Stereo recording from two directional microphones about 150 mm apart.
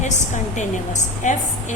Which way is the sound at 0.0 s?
55° left (ahead or behind).